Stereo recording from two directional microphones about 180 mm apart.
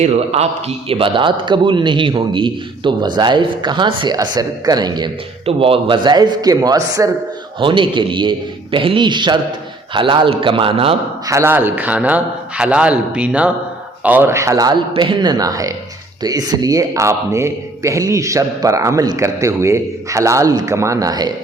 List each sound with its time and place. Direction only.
0.0 s a man's voice: 35° right (ahead or behind)
11.3 s a man's voice: 15° right (ahead or behind)